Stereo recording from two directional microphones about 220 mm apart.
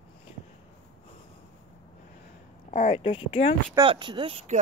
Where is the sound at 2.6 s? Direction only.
30° left (ahead or behind).